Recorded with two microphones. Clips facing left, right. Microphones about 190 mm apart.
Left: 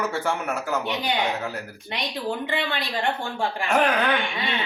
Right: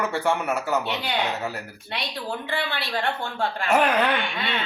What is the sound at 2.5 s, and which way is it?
Speech, 15° left (ahead or behind).